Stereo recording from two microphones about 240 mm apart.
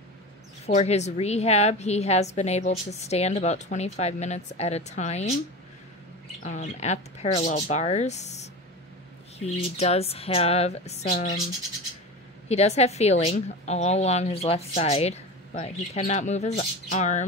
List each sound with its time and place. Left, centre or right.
0.7 s a woman's voice: left
6.4 s a woman's voice: left
12.4 s a woman's voice: left